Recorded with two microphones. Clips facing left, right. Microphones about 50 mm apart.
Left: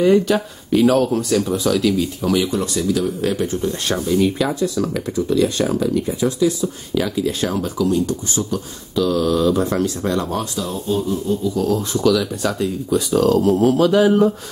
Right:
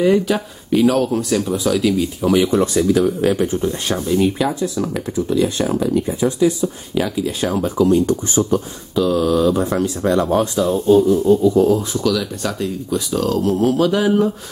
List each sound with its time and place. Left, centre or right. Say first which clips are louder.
0.0 s speech: left 1 dB; centre
2.5 s speech: right 5 dB; right; by 6.0 s centre
6.0 s speech: right 2 dB; right
7.0 s speech: even; centre
7.6 s speech: right 7 dB; right
8.9 s speech: right 2 dB; centre
10.4 s speech: right 8 dB; right
11.5 s speech: right 5 dB; right
11.9 s speech: left 2 dB; centre